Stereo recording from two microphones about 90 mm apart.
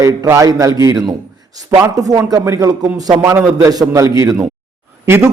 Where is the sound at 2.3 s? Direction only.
35° right (ahead or behind).